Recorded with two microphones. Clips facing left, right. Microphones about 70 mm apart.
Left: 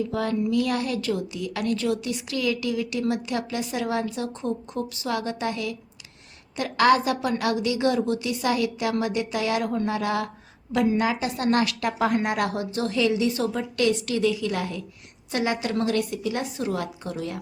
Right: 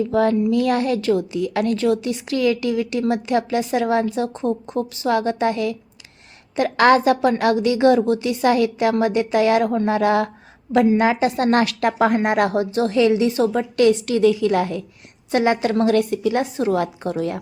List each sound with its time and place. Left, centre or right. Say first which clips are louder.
0.1 s a woman's voice: right 7 dB; right